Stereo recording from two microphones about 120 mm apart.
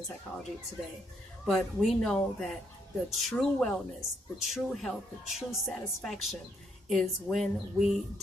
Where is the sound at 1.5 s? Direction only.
Centre (ahead or behind).